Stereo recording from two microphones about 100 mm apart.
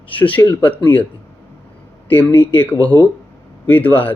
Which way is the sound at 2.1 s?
20° left (ahead or behind).